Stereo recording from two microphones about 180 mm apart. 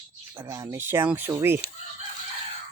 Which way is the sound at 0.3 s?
15° right (ahead or behind).